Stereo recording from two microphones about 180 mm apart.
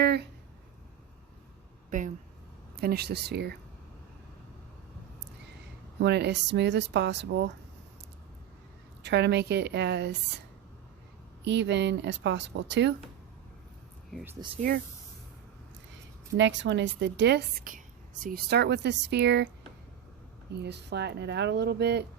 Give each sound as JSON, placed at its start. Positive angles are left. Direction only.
{"t": 0.0, "sound": "a sound", "side_deg": -65}
{"t": 1.9, "sound": "speech", "side_deg": -45}
{"t": 2.8, "sound": "speech", "side_deg": -65}
{"t": 6.0, "sound": "a woman's voice", "side_deg": -70}
{"t": 9.0, "sound": "a woman's voice", "side_deg": -70}
{"t": 11.4, "sound": "a woman's voice", "side_deg": -75}
{"t": 16.4, "sound": "a woman's voice", "side_deg": -90}
{"t": 20.5, "sound": "a woman's voice", "side_deg": -70}